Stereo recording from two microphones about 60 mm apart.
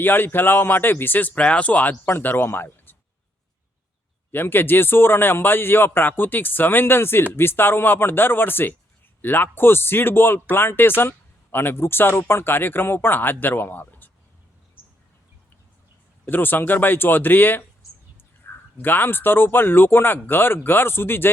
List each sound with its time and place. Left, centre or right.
0.0 s a man's voice: left
2.0 s a man's voice: left
4.3 s a man's voice: left
16.2 s a man's voice: left
17.8 s a sound: left
18.2 s speech: left